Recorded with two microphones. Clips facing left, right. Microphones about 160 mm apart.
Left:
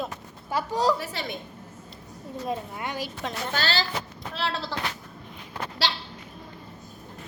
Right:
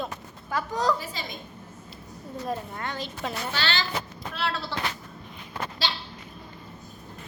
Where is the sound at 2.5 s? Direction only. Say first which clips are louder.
Left 1 dB; 10° left (ahead or behind).